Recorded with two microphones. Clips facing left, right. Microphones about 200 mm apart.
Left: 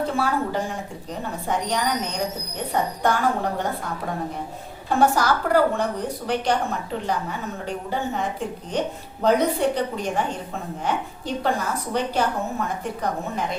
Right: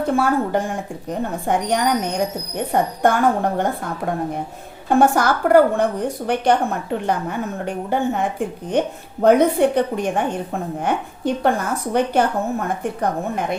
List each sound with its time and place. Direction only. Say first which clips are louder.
0.2 s a woman's voice: right 5 dB; 50° right (ahead or behind)
4.9 s a woman's voice: right 4 dB; 50° right (ahead or behind)